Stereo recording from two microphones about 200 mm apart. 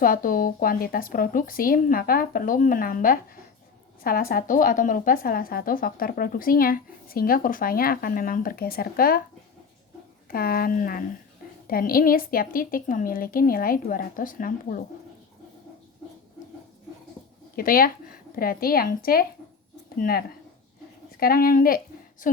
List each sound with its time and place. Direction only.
0.0 s speech: 45° left (ahead or behind)
10.2 s speech: 50° left (ahead or behind)
17.6 s a woman's voice: 45° left (ahead or behind)